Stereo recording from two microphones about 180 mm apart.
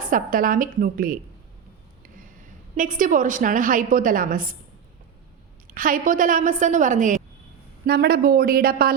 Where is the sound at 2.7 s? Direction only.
45° right (ahead or behind).